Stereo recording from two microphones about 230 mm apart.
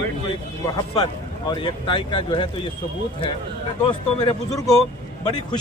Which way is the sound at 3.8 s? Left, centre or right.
Centre.